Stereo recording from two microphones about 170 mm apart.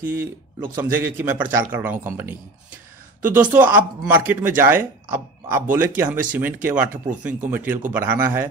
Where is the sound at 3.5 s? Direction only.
10° right (ahead or behind).